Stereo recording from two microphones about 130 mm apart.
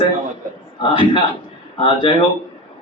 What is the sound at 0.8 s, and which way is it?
A man's voice, 40° left (ahead or behind).